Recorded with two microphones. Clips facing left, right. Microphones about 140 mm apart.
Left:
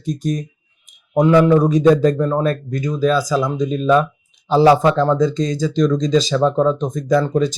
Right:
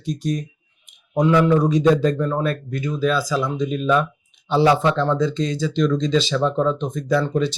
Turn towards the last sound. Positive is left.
turn(degrees=40)  # may be behind; listen again after turning